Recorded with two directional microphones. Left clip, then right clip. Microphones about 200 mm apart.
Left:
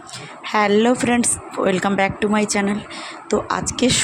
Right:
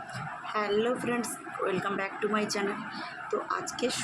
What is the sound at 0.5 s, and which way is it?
Speech, 45° left (ahead or behind).